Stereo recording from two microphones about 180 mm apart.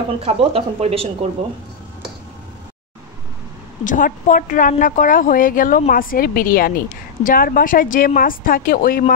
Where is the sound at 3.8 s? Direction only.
45° left (ahead or behind).